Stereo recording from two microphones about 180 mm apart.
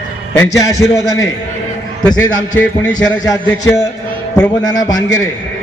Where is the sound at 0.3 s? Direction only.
15° left (ahead or behind).